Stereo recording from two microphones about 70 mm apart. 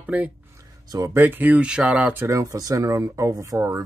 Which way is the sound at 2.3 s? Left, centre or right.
Right.